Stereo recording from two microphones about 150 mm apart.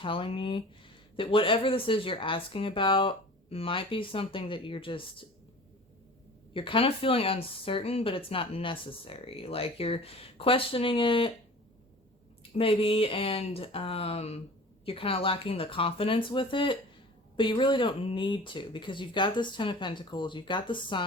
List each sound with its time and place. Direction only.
0.0 s speech: 35° left (ahead or behind)
6.5 s speech: 35° left (ahead or behind)
12.5 s speech: 40° left (ahead or behind)